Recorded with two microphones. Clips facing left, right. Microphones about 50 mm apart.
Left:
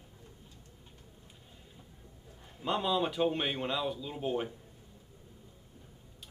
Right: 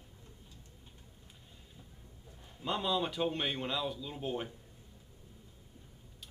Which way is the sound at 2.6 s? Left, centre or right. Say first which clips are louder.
Left 3 dB; centre.